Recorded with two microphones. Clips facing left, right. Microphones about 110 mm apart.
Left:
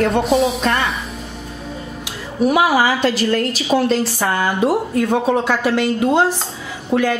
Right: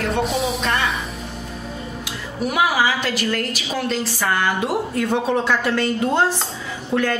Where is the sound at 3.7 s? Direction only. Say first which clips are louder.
Left 10 dB; 35° left (ahead or behind).